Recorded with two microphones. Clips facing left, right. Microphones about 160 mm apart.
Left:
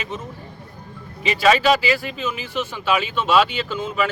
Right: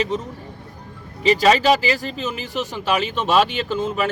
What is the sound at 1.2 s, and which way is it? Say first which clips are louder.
Speech: right 2 dB; 35° right (ahead or behind).